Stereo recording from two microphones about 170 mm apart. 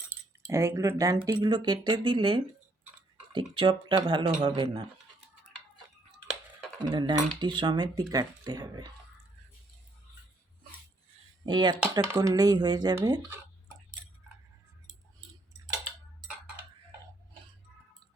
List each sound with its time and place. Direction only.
0.4 s speech: 20° right (ahead or behind)
6.8 s speech: 25° right (ahead or behind)
11.4 s speech: 25° right (ahead or behind)